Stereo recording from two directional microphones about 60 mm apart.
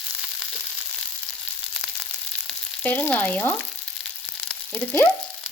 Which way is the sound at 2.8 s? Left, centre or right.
Left.